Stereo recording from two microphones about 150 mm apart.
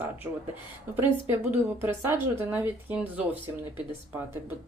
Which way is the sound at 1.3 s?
15° right (ahead or behind).